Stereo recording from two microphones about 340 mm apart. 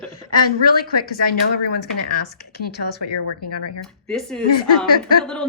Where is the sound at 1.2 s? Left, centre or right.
Left.